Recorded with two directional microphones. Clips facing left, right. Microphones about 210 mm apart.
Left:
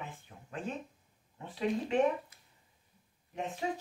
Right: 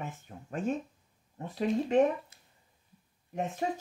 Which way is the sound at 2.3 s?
25° right (ahead or behind).